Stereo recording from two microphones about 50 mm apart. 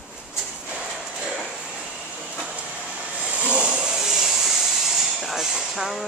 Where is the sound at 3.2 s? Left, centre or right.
Right.